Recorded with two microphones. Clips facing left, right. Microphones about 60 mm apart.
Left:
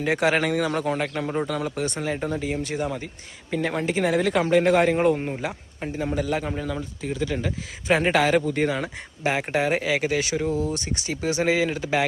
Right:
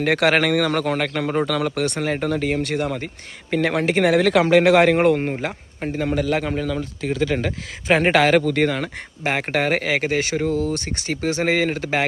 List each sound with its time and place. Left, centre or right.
0.0 s speech: right
1.5 s speech: right
3.5 s speech: right
5.3 s speech: right
7.0 s speech: right
7.3 s speech: right